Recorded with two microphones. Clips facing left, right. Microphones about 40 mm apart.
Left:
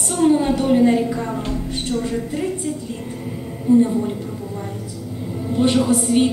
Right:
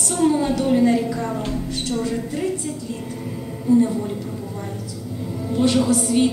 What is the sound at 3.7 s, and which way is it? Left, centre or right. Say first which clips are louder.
Speech: left 2 dB; left.